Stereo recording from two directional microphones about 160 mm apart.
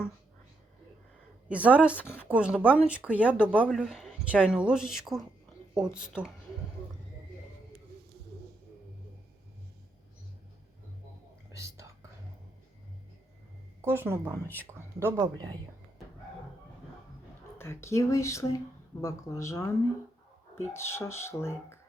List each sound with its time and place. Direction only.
1.5 s a woman's voice: 10° right (ahead or behind)
11.5 s whispering: 20° right (ahead or behind)
13.8 s speech: 15° right (ahead or behind)
14.4 s speech: 10° left (ahead or behind)
14.7 s speech: 15° right (ahead or behind)
17.6 s speech: 15° left (ahead or behind)
20.7 s speech: 15° left (ahead or behind)